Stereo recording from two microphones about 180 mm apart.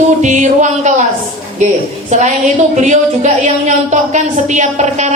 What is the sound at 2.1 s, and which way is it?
A woman's voice, 40° right (ahead or behind).